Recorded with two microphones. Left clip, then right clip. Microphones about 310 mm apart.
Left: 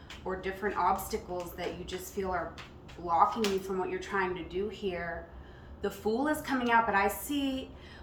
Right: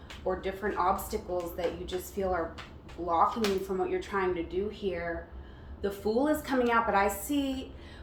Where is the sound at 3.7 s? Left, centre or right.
Centre.